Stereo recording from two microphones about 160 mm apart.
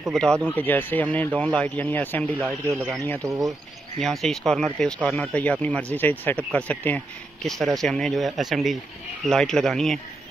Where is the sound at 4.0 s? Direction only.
Centre (ahead or behind).